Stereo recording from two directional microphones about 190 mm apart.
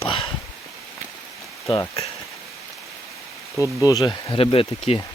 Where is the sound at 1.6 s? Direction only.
15° left (ahead or behind).